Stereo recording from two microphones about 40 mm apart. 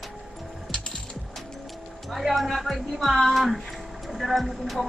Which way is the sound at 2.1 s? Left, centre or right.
Centre.